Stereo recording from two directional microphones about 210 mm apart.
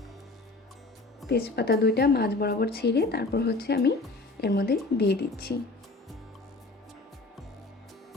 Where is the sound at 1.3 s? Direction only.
50° left (ahead or behind).